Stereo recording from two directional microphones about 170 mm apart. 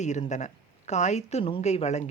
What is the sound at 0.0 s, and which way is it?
A woman's voice, 45° left (ahead or behind).